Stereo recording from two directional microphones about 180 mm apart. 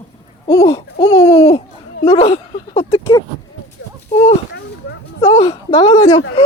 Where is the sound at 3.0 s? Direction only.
20° left (ahead or behind).